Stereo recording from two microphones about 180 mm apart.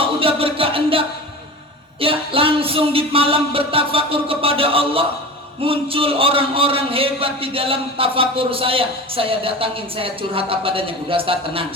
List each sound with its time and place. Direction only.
0.0 s music: 30° right (ahead or behind)
2.0 s a man's voice: 30° right (ahead or behind)